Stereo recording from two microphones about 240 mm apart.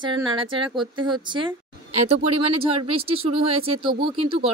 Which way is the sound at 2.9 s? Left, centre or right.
Right.